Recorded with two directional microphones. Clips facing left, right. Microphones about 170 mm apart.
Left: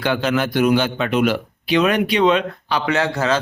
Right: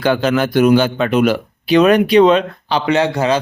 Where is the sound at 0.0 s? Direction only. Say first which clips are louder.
Right 4 dB; 40° right (ahead or behind).